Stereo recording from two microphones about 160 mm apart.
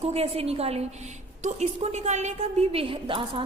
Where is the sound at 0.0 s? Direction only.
40° right (ahead or behind).